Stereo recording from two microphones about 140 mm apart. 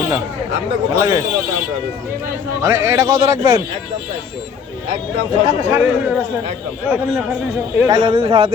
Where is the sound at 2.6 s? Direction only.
20° right (ahead or behind).